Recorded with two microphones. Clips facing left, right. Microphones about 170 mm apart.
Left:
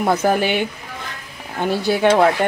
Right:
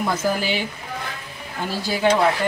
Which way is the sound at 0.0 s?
65° left (ahead or behind).